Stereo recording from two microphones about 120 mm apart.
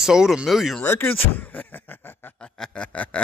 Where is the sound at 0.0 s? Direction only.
5° right (ahead or behind).